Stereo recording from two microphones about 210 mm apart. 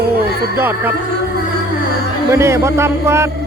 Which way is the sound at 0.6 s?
10° right (ahead or behind).